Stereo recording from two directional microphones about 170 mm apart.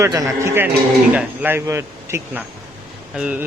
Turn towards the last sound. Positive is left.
turn(degrees=-10)  # may be behind; listen again after turning